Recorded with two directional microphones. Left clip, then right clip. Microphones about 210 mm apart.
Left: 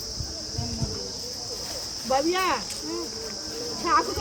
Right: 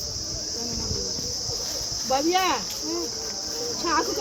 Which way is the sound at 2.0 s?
25° right (ahead or behind).